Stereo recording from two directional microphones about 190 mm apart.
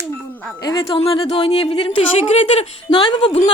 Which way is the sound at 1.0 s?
30° left (ahead or behind).